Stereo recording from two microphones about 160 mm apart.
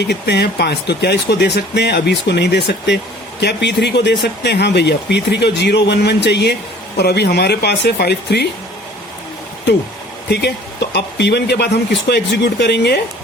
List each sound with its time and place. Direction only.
0.0 s speech: 90° left
10.2 s speech: 90° left